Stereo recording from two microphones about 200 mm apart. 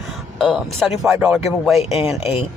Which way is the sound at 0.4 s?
Centre (ahead or behind).